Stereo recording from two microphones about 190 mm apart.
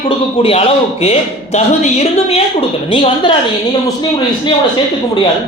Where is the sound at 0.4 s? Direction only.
30° left (ahead or behind).